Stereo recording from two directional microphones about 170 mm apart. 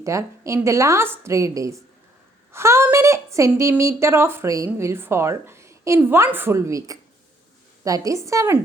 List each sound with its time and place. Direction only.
0.0 s a woman's voice: 15° right (ahead or behind)